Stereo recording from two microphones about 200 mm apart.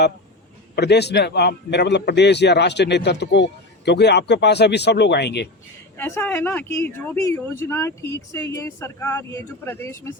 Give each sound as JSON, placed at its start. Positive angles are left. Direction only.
{"t": 0.8, "sound": "a man's voice", "side_deg": 55}
{"t": 6.0, "sound": "speech", "side_deg": 10}